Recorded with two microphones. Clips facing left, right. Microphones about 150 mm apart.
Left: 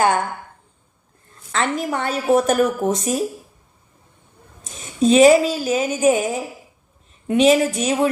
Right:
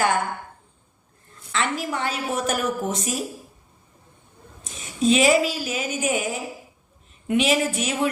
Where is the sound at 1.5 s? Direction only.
50° left (ahead or behind).